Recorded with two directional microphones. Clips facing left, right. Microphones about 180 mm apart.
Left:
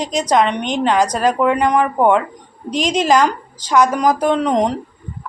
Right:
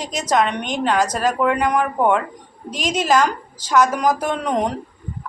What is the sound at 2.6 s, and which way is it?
Speech, 5° right (ahead or behind).